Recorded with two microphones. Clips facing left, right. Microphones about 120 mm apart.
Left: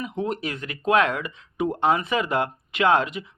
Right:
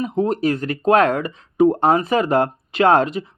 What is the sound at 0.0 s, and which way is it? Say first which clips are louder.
Speech: right 8 dB; 35° right (ahead or behind).